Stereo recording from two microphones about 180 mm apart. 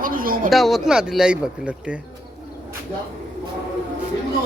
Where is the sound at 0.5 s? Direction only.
Centre (ahead or behind).